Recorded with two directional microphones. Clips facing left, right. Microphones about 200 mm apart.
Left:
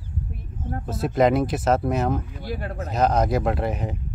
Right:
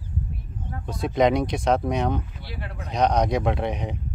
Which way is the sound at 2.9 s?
5° left (ahead or behind).